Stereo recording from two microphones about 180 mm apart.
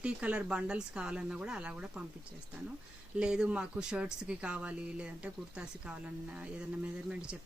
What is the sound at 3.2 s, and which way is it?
Speech, 5° right (ahead or behind).